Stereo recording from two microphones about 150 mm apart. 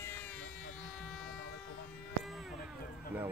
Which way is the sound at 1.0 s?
Centre (ahead or behind).